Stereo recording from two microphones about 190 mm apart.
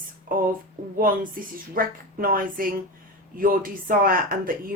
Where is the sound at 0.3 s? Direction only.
50° right (ahead or behind).